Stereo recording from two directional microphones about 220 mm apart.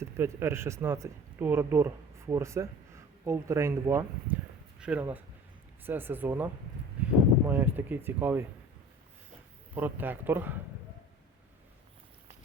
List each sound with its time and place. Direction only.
0.0 s speech: 10° right (ahead or behind)
7.0 s a sound: 5° right (ahead or behind)
7.4 s speech: 10° right (ahead or behind)
9.7 s speech: 10° right (ahead or behind)